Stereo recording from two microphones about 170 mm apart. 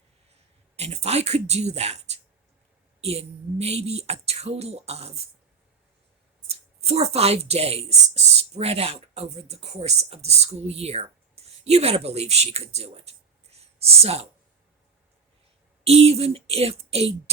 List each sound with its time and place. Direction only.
0.8 s speech: 40° right (ahead or behind)
6.5 s speech: 35° right (ahead or behind)
15.8 s speech: 35° right (ahead or behind)